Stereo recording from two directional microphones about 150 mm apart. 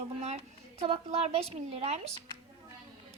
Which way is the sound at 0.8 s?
40° right (ahead or behind).